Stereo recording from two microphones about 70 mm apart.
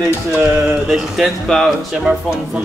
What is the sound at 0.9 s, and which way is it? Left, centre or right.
Speech, centre.